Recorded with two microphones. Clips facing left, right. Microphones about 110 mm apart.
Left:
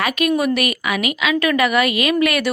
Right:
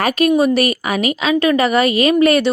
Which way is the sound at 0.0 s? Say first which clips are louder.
Right 4 dB; 35° right (ahead or behind).